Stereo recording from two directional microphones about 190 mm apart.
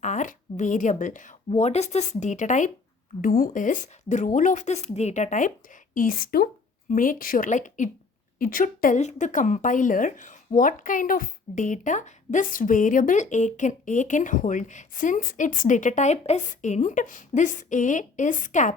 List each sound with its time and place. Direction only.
0.0 s a woman's voice: 40° left (ahead or behind)